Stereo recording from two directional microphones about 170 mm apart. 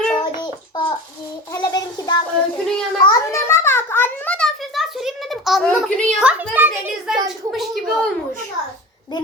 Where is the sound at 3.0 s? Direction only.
20° left (ahead or behind); by 6.4 s 5° right (ahead or behind).